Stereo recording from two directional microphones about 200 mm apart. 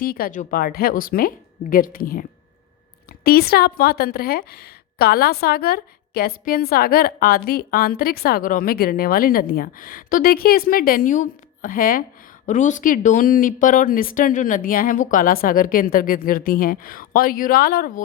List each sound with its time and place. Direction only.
0.0 s a woman's voice: 45° left (ahead or behind)
3.2 s a woman's voice: 50° left (ahead or behind)